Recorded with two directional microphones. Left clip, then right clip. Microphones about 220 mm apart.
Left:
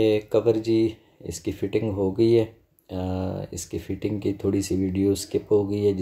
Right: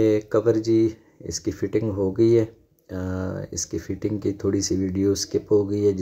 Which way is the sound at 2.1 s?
40° right (ahead or behind).